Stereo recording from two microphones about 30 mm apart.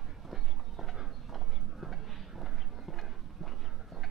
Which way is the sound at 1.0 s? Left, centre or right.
Centre.